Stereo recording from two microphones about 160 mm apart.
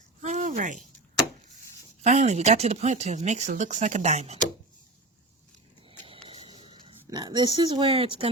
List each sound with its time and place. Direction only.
0.2 s a sound: 45° right (ahead or behind)
2.0 s speech: 45° right (ahead or behind)
6.2 s oink: 40° right (ahead or behind)